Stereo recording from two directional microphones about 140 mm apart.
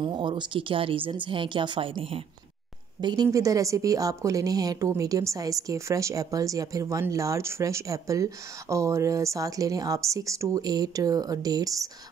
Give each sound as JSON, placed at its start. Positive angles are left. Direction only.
{"t": 0.0, "sound": "a woman's voice", "side_deg": -35}